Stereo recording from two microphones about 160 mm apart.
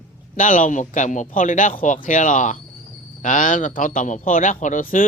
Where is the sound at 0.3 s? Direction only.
55° left (ahead or behind).